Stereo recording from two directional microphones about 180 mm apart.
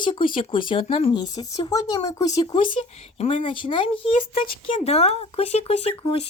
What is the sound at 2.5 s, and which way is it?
Speech, 30° left (ahead or behind).